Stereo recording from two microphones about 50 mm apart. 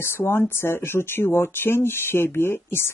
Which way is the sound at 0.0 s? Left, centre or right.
Left.